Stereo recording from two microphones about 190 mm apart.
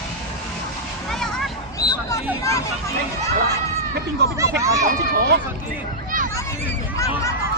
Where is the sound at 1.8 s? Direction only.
20° left (ahead or behind).